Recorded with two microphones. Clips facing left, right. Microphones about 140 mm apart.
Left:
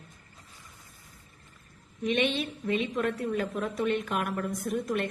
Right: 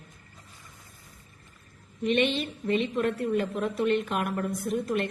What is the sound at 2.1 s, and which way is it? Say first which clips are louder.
Speech: right 2 dB; 55° right (ahead or behind).